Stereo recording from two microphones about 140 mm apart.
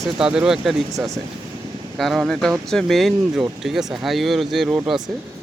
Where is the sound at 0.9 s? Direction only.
25° right (ahead or behind).